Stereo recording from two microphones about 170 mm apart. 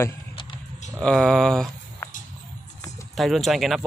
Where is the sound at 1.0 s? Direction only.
5° left (ahead or behind).